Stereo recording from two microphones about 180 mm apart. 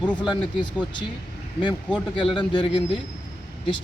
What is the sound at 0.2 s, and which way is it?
Speech, 25° left (ahead or behind).